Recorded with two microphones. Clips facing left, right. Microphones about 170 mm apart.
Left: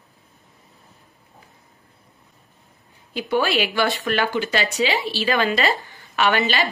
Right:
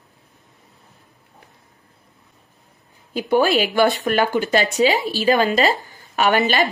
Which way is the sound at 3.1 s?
45° right (ahead or behind).